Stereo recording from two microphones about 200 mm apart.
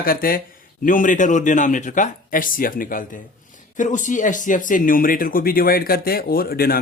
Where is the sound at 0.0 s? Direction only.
45° left (ahead or behind).